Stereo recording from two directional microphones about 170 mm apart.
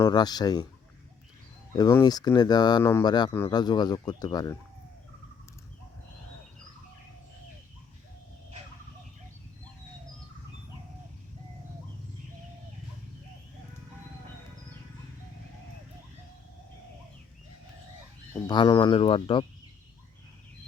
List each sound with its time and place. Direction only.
0.0 s speech: 25° left (ahead or behind)
1.7 s speech: 20° left (ahead or behind)
2.8 s speech: 15° left (ahead or behind)
18.4 s speech: 25° left (ahead or behind)